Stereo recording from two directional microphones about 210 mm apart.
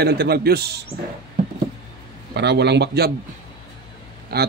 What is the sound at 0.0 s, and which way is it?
Speech, 50° right (ahead or behind).